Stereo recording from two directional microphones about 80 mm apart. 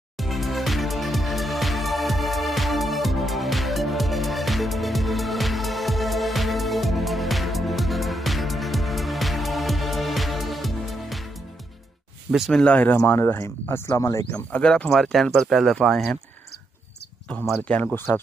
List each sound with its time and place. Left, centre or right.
0.2 s music: centre
12.3 s speech: centre
12.6 s speech: centre
12.9 s speech: left
14.0 s speech: left
14.5 s speech: centre
14.9 s speech: centre
17.3 s speech: centre
17.9 s speech: left